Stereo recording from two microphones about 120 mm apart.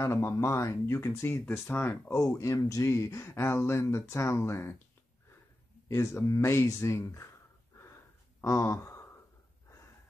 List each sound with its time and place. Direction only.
0.0 s speech: 20° left (ahead or behind)
5.9 s speech: 20° left (ahead or behind)
7.8 s a sound: 20° left (ahead or behind)